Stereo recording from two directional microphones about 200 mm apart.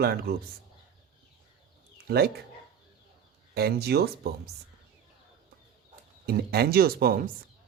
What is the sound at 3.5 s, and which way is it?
Speech, 55° right (ahead or behind).